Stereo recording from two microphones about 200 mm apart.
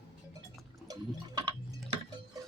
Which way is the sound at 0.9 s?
20° right (ahead or behind).